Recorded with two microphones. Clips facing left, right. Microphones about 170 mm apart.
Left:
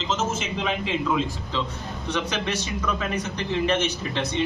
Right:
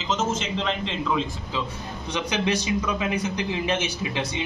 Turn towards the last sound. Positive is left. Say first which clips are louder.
# left 2 dB
turn(degrees=-10)  # may be behind; listen again after turning